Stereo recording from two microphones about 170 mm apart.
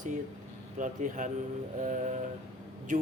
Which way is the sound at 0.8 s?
50° right (ahead or behind).